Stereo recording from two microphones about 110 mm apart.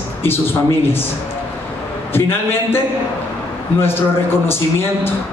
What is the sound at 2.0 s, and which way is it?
Speech, 20° left (ahead or behind).